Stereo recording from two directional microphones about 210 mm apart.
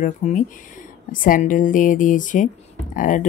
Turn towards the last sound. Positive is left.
turn(degrees=40)  # may be behind; listen again after turning